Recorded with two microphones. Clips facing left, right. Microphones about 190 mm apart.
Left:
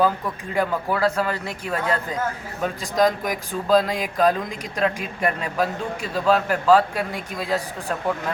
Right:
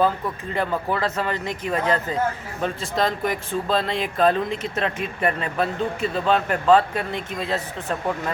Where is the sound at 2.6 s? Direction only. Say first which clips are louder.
Left 3 dB; 15° left (ahead or behind).